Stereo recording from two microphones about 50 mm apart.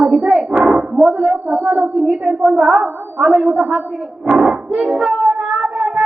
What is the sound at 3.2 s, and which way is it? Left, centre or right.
Speech, right.